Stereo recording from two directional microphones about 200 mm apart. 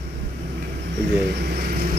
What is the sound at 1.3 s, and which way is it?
Speech, 50° right (ahead or behind).